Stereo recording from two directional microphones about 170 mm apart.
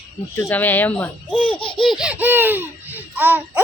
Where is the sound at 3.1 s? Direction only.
10° right (ahead or behind).